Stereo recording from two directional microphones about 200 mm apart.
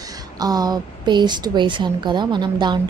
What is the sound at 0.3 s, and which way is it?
A woman's voice, 20° right (ahead or behind).